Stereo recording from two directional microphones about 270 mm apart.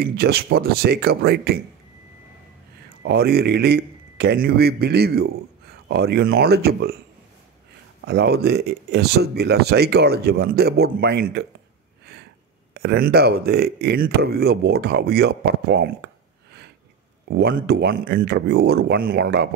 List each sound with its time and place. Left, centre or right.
0.0 s speech: right
3.0 s a man's voice: right
8.0 s speech: right
12.7 s speech: right
17.3 s speech: right